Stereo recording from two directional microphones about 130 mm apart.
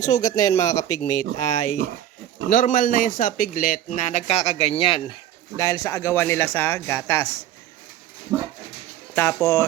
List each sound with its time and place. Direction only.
0.2 s speech: 30° left (ahead or behind)
1.5 s speech: 85° left; by 5.1 s 45° left (ahead or behind)
5.5 s speech: 25° left (ahead or behind)
9.1 s speech: 20° left (ahead or behind)